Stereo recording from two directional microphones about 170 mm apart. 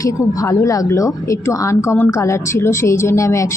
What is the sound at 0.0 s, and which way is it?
A woman's voice, 20° left (ahead or behind).